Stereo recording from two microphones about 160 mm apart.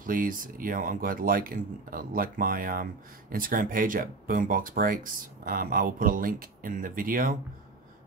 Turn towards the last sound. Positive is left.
turn(degrees=-60)  # may be behind; listen again after turning